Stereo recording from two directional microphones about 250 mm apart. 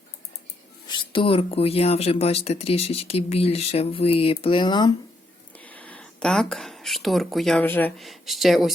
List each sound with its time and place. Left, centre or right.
0.9 s speech: centre
5.5 s speech: centre